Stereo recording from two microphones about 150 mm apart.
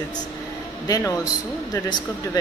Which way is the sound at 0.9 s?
25° left (ahead or behind).